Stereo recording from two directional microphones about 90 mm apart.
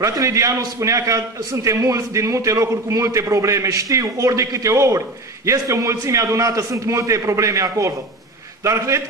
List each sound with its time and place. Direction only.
0.0 s a man's voice: 40° right (ahead or behind)